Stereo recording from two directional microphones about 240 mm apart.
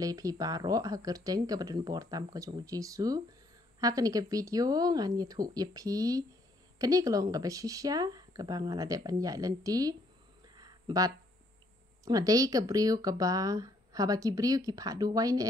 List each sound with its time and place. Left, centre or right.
0.0 s speech: centre
10.5 s a sound: centre
12.0 s speech: centre